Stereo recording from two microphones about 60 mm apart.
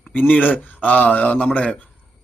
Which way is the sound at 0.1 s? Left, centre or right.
Left.